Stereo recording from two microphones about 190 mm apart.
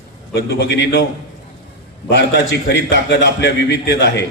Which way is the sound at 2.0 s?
60° left (ahead or behind).